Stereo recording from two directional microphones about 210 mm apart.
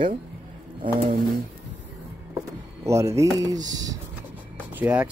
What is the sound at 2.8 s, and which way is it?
Speech, 15° right (ahead or behind).